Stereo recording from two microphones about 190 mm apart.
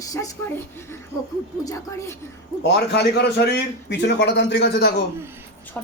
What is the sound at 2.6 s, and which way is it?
A man's voice, 60° left (ahead or behind).